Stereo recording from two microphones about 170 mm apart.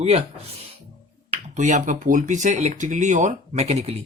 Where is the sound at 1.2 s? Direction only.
45° right (ahead or behind).